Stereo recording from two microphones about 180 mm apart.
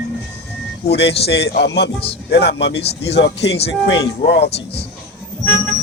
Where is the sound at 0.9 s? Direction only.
70° left (ahead or behind).